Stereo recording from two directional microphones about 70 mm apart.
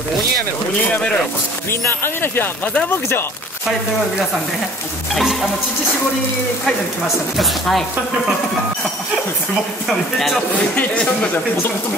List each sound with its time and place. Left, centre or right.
1.7 s speech: left
5.1 s speech: centre
7.3 s speech: centre
9.8 s speech: centre
10.7 s a woman's voice: left